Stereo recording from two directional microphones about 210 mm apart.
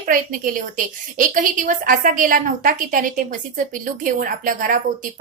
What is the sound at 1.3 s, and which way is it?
A woman's voice, 40° right (ahead or behind).